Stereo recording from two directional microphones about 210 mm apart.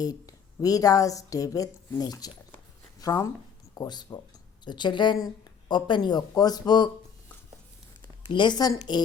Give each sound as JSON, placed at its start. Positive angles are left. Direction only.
{"t": 0.0, "sound": "speech", "side_deg": 15}
{"t": 8.2, "sound": "speech", "side_deg": 20}